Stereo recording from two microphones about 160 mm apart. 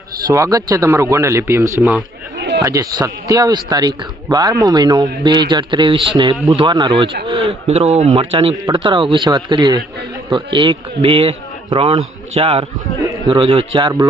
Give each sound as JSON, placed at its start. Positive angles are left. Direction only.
{"t": 0.3, "sound": "a man's voice", "side_deg": -20}
{"t": 2.6, "sound": "a man's voice", "side_deg": -20}